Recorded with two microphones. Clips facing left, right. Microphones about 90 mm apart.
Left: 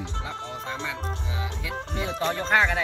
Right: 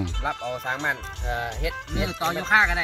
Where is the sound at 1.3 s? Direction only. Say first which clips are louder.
Right 5 dB; 65° right (ahead or behind).